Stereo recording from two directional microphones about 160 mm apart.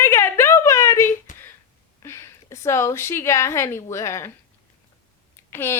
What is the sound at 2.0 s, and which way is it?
A woman's voice, 15° left (ahead or behind).